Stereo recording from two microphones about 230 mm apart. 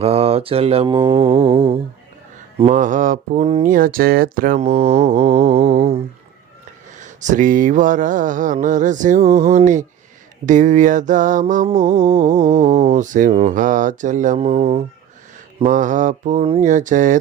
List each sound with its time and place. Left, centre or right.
0.0 s mantra: right